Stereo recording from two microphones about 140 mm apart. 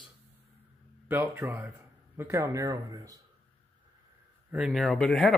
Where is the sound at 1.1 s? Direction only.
10° right (ahead or behind).